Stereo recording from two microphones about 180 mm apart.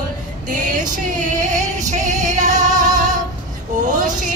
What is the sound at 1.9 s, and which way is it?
Music, 40° right (ahead or behind).